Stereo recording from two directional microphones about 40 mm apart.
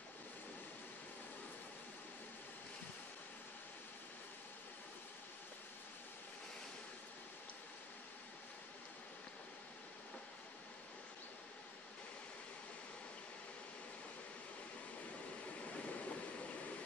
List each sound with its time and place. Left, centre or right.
15.5 s waves: left